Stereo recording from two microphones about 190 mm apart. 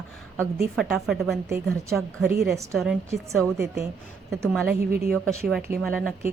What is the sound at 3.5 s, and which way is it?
Speech, 15° right (ahead or behind).